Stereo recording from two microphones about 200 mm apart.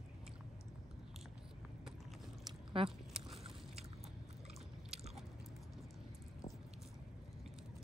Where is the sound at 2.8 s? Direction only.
30° right (ahead or behind).